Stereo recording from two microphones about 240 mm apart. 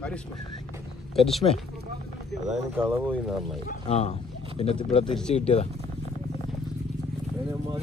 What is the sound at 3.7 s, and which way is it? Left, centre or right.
Speech, left.